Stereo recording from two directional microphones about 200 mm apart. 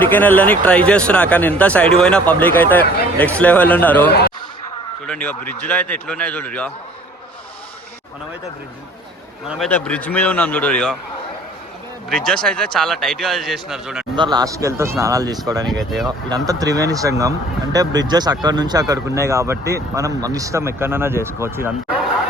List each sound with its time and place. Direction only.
0.0 s speech: 10° left (ahead or behind)
9.6 s speech: 5° left (ahead or behind)
12.0 s speech: centre (ahead or behind)
14.2 s speech: 20° right (ahead or behind)
15.6 s speech: centre (ahead or behind)
16.0 s speech: 20° right (ahead or behind)